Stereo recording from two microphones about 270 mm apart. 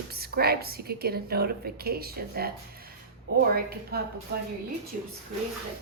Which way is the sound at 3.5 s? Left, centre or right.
Right.